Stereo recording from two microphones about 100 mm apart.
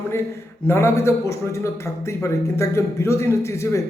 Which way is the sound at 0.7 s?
25° left (ahead or behind).